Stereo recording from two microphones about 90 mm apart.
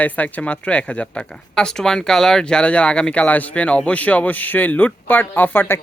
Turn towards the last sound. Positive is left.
turn(degrees=25)  # may be behind; listen again after turning